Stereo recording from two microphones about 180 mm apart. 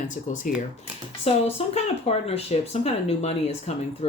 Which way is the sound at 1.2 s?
35° left (ahead or behind).